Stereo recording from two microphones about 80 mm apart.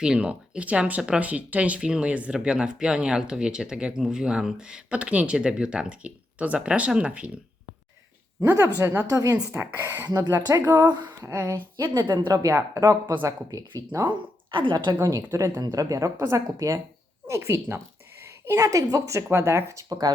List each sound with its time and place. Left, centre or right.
0.0 s speech: centre
8.6 s speech: right
9.0 s speech: right
14.1 s a woman's voice: right
14.9 s speech: right
18.2 s a sound: right
18.5 s speech: right